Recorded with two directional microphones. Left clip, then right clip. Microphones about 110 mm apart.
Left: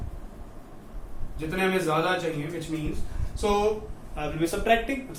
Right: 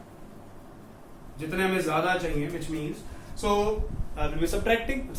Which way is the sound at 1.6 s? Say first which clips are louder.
Left 1 dB; 20° left (ahead or behind).